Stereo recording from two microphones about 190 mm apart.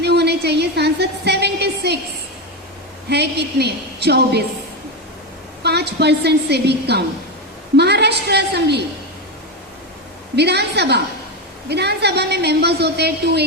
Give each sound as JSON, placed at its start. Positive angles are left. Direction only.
{"t": 0.0, "sound": "a sound", "side_deg": -60}
{"t": 3.1, "sound": "a woman's voice", "side_deg": -60}
{"t": 5.6, "sound": "a woman's voice", "side_deg": -60}
{"t": 10.3, "sound": "a woman's voice", "side_deg": -60}